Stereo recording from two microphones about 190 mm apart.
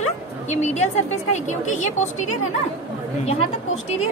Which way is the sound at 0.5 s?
35° left (ahead or behind).